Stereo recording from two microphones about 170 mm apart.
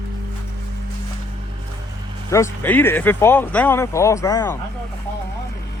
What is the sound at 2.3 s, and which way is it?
Speech, 15° left (ahead or behind).